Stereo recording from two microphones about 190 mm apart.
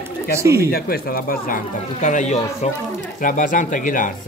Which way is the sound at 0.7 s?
55° left (ahead or behind).